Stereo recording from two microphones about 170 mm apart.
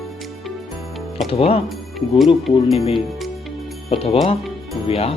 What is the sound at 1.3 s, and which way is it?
Speech, 35° left (ahead or behind).